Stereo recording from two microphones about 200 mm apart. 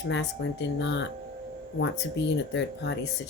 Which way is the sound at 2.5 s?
65° left (ahead or behind).